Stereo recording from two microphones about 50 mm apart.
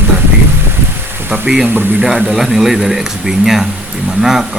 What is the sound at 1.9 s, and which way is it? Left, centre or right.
Speech, centre.